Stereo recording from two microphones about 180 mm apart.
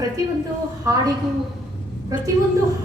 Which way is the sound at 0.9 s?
20° right (ahead or behind).